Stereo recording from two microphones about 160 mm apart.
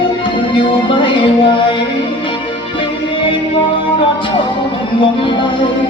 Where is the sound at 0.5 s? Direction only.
35° left (ahead or behind).